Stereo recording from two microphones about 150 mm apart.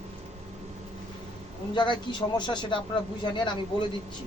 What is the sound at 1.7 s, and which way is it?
A man's voice, 30° left (ahead or behind).